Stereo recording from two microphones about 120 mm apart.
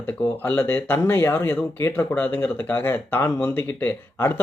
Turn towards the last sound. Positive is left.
turn(degrees=15)  # may be behind; listen again after turning